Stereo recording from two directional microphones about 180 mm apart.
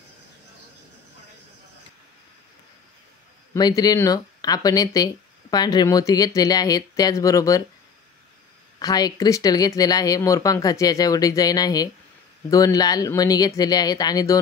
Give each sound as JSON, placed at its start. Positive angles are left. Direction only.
{"t": 3.5, "sound": "speech", "side_deg": 20}
{"t": 8.7, "sound": "speech", "side_deg": 20}